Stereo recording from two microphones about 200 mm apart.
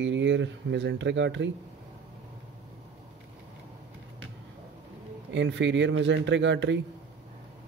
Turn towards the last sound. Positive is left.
turn(degrees=-65)  # may be behind; listen again after turning